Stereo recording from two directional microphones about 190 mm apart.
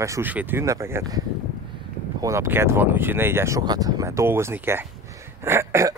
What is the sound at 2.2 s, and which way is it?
Speech, 15° right (ahead or behind).